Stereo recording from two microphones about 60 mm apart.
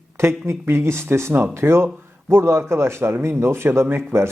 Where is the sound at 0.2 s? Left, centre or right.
Right.